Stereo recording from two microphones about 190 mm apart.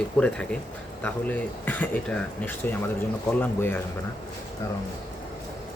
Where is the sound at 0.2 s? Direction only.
10° left (ahead or behind).